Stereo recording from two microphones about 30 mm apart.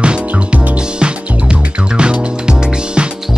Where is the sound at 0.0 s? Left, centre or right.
Right.